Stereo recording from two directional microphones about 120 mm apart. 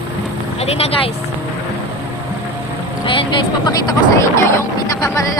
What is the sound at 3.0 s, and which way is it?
Speech, 45° left (ahead or behind).